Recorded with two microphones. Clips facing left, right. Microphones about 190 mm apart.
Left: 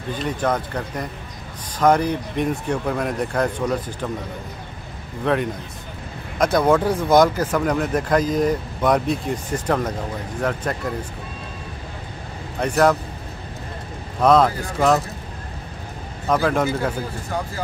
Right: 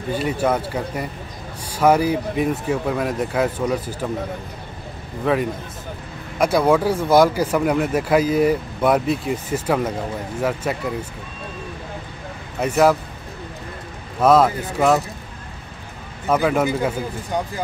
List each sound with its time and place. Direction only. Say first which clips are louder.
0.1 s speech: right 2 dB; 10° right (ahead or behind)
5.2 s speech: right 1 dB; centre (ahead or behind)
12.5 s speech: right 1 dB; 5° right (ahead or behind)
14.2 s speech: right 1 dB; 5° right (ahead or behind)
16.3 s speech: right 1 dB; 5° right (ahead or behind)
16.6 s speech: right 2 dB; 15° right (ahead or behind)